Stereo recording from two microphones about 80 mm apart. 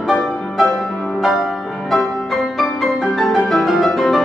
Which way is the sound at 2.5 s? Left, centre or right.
Centre.